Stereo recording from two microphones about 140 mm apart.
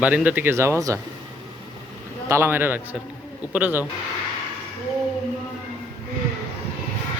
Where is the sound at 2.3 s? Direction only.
20° right (ahead or behind).